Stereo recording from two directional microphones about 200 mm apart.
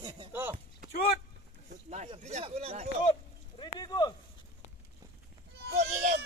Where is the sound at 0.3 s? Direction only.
10° right (ahead or behind).